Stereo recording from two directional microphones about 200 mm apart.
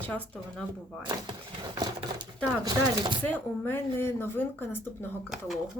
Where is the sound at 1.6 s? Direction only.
20° right (ahead or behind).